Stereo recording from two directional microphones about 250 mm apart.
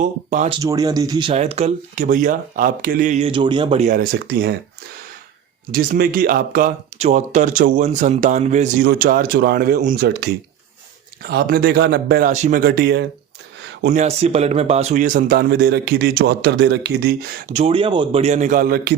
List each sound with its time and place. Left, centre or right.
0.0 s speech: right
0.6 s speech: centre
1.3 s speech: right
5.7 s speech: right
13.8 s speech: right
17.6 s speech: right